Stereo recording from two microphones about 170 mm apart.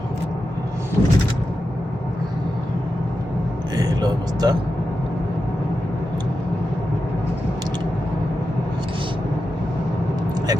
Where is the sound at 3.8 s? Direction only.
20° right (ahead or behind).